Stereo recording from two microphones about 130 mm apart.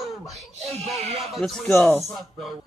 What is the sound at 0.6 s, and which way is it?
Speech, 55° right (ahead or behind).